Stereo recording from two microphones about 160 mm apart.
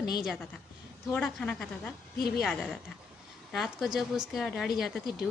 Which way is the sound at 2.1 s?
75° left (ahead or behind).